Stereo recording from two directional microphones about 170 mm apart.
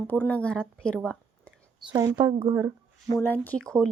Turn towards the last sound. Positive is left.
turn(degrees=5)  # may be behind; listen again after turning